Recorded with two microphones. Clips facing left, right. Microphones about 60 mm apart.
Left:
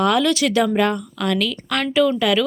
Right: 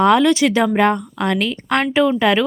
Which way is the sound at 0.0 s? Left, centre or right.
Right.